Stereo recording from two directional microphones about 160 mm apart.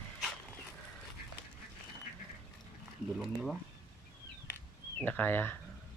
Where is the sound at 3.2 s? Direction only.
Centre (ahead or behind).